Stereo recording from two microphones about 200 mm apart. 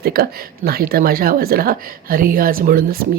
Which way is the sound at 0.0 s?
50° right (ahead or behind).